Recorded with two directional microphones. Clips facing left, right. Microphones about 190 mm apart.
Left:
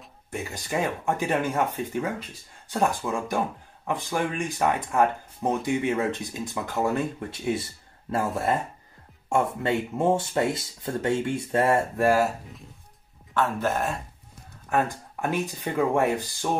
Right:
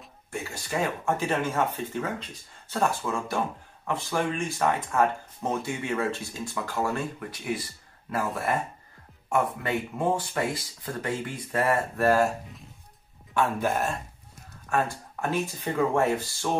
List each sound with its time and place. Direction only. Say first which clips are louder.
0.3 s speech: left 2 dB; 20° left (ahead or behind)
4.4 s speech: left 1 dB; 15° left (ahead or behind)
12.0 s speech: right 1 dB; 10° left (ahead or behind)
13.3 s a man's voice: even; 10° right (ahead or behind)
14.7 s speech: left 2 dB; 20° left (ahead or behind)